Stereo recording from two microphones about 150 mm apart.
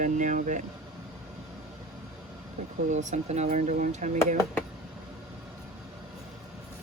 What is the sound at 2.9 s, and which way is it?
Speech, 55° right (ahead or behind).